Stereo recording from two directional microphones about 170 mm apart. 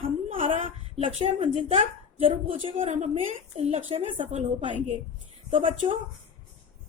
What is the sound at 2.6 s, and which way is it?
Speech, 35° right (ahead or behind).